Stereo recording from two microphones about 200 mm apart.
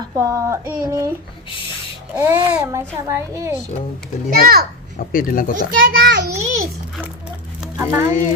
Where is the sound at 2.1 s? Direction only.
10° right (ahead or behind).